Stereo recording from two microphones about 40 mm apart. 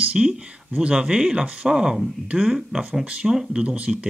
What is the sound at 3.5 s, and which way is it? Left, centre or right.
Speech, right.